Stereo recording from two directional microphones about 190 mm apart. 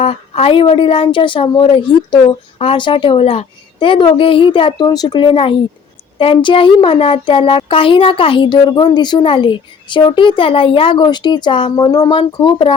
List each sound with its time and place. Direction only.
0.0 s speech: 30° left (ahead or behind)